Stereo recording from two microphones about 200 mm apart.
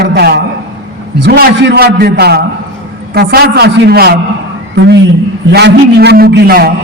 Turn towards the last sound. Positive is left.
turn(degrees=-50)  # may be behind; listen again after turning